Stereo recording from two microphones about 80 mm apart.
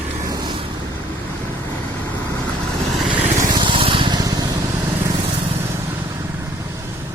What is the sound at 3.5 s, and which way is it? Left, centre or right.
Vehicle, right.